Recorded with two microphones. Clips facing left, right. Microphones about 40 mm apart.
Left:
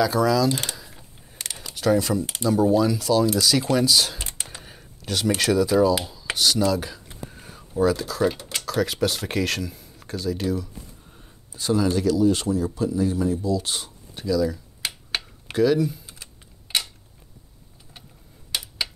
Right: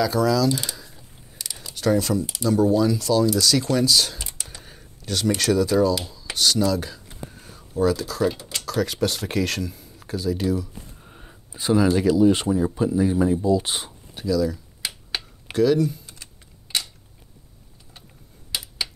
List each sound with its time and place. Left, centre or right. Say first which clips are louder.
0.0 s speech: even; centre
1.4 s a sound: left 2 dB; left
1.8 s speech: even; centre
4.6 s a sound: left 1 dB; centre
5.4 s speech: left 1 dB; centre
6.3 s a sound: even; centre
8.5 s speech: even; centre
11.1 s speech: right 3 dB; right
14.1 s speech: even; centre